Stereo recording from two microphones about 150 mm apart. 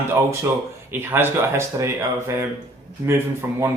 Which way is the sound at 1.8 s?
20° right (ahead or behind).